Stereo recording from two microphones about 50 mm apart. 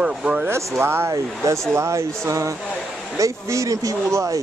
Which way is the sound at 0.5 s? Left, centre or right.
Right.